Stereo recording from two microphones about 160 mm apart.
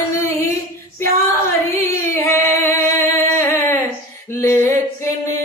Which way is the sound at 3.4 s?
20° left (ahead or behind).